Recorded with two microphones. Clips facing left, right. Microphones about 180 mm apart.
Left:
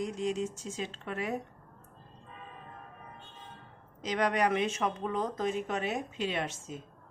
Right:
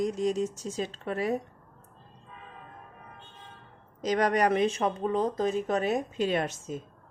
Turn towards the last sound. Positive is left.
turn(degrees=-40)  # may be behind; listen again after turning